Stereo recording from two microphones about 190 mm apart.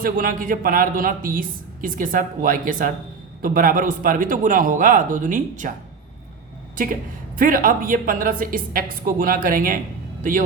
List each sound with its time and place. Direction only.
0.0 s a woman's voice: 50° right (ahead or behind)
7.3 s a woman's voice: 45° right (ahead or behind)